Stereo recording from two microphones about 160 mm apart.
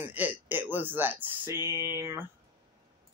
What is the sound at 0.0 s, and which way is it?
Speech, 10° right (ahead or behind).